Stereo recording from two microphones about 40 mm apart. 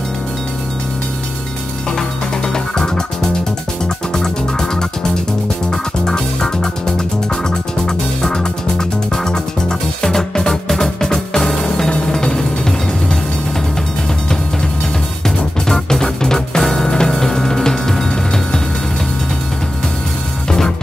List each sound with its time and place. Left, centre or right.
1.9 s music: centre
15.2 s music: centre
20.4 s music: centre